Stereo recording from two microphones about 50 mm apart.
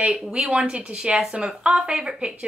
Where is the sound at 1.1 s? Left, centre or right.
Centre.